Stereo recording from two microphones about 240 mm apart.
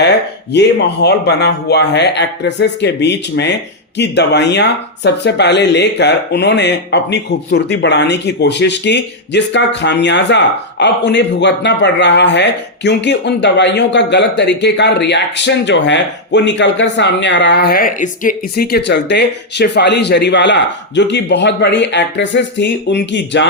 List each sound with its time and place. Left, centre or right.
0.5 s speech: left